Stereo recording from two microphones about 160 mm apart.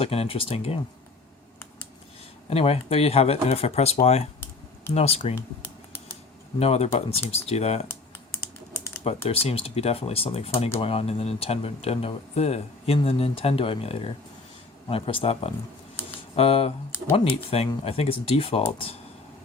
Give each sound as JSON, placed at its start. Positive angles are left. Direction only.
{"t": 0.0, "sound": "speech", "side_deg": 35}
{"t": 2.5, "sound": "speech", "side_deg": 35}
{"t": 6.6, "sound": "speech", "side_deg": 40}
{"t": 9.2, "sound": "speech", "side_deg": 40}